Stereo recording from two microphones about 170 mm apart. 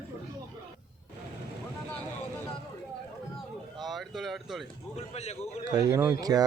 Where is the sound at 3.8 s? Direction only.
Centre (ahead or behind).